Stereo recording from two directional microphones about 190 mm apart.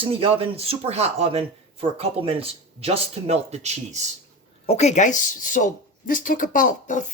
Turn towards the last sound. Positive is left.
turn(degrees=45)  # may be behind; listen again after turning